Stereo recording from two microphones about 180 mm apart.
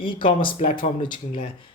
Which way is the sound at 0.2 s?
25° left (ahead or behind).